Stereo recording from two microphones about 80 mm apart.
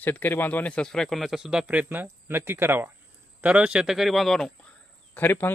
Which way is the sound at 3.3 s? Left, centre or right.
Centre.